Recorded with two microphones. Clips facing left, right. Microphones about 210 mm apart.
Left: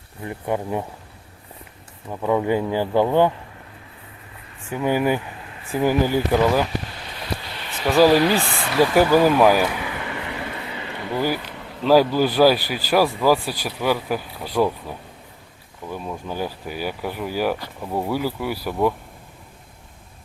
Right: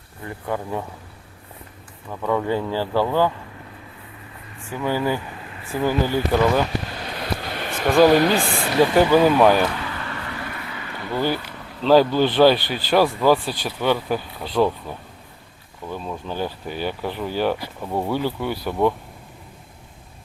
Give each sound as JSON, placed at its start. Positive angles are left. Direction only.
{"t": 0.3, "sound": "speech", "side_deg": 20}
{"t": 2.0, "sound": "speech", "side_deg": 15}
{"t": 4.8, "sound": "speech", "side_deg": 15}
{"t": 7.5, "sound": "a sound", "side_deg": -50}
{"t": 7.9, "sound": "speech", "side_deg": 5}
{"t": 8.8, "sound": "vehicle", "side_deg": 5}
{"t": 11.8, "sound": "speech", "side_deg": 5}
{"t": 15.9, "sound": "speech", "side_deg": 10}